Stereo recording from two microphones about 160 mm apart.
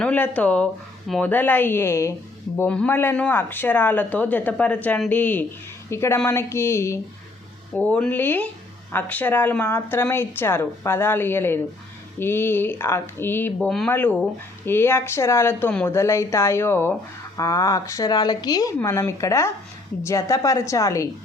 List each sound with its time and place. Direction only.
0.0 s speech: 10° left (ahead or behind)
13.6 s speech: 5° left (ahead or behind); by 21.1 s 20° left (ahead or behind)